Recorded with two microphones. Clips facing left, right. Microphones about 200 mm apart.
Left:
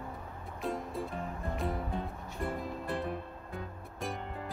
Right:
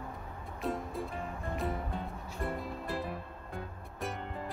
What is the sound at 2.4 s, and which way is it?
Music, centre (ahead or behind).